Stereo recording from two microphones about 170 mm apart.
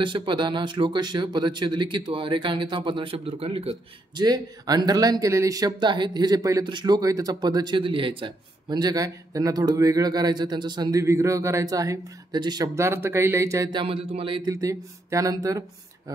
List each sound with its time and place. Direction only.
0.0 s speech: 30° right (ahead or behind)
4.2 s speech: 25° right (ahead or behind)